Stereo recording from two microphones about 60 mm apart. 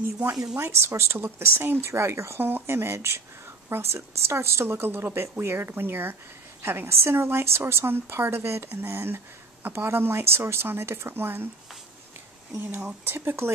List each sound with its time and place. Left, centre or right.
0.6 s speech: right
12.7 s speech: right
13.1 s speech: right